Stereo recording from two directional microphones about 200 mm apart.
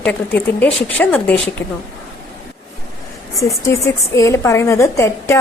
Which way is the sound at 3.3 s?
15° left (ahead or behind).